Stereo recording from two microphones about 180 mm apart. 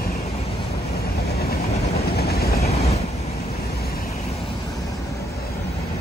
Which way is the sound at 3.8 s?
55° left (ahead or behind).